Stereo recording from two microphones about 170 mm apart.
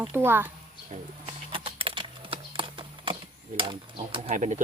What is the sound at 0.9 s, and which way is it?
Typing, 30° right (ahead or behind).